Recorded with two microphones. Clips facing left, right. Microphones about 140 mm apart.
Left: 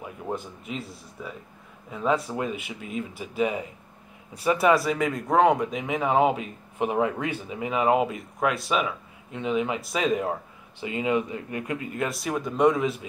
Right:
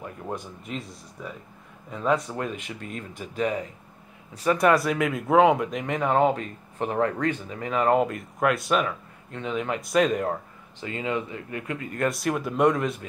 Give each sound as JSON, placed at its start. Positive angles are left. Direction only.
{"t": 0.0, "sound": "speech", "side_deg": 5}
{"t": 10.8, "sound": "speech", "side_deg": 15}
{"t": 12.0, "sound": "speech", "side_deg": 0}